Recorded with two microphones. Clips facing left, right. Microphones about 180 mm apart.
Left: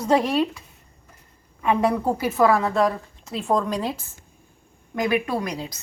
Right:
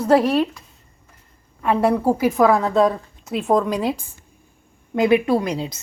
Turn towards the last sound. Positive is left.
turn(degrees=-25)  # may be behind; listen again after turning